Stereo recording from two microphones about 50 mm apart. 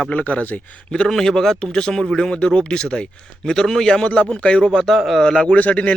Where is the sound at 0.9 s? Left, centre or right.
Centre.